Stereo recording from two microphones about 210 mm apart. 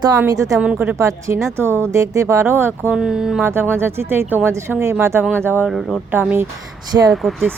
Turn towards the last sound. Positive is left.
turn(degrees=0)  # may be behind; listen again after turning